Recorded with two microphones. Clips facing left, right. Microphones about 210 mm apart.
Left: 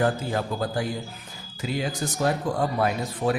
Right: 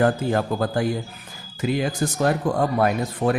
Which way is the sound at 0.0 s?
55° right (ahead or behind).